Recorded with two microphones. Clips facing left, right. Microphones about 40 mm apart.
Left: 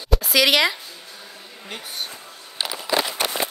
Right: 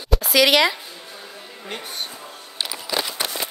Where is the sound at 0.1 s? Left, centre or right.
Centre.